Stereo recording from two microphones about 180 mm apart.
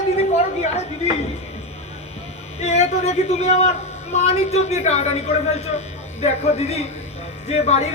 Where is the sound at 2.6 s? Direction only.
40° left (ahead or behind).